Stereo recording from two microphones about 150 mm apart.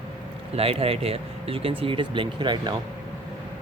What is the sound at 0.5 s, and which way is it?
Speech, 40° right (ahead or behind).